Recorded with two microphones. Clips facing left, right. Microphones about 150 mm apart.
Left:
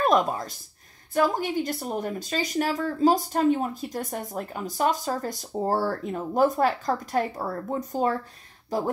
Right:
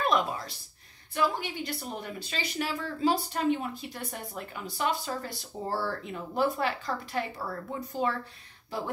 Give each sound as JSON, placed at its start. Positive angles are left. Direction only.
{"t": 0.0, "sound": "speech", "side_deg": 45}